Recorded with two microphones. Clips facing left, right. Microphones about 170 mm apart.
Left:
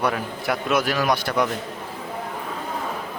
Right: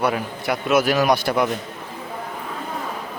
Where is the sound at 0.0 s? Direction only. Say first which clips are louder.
Right 2 dB; 5° right (ahead or behind).